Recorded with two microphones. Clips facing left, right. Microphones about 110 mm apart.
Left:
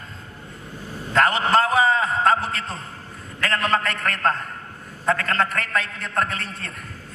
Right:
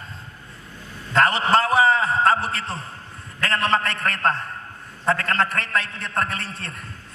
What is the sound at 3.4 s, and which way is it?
A man's voice, 25° right (ahead or behind).